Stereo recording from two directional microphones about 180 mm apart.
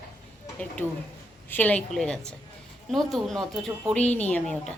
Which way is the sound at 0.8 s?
10° left (ahead or behind).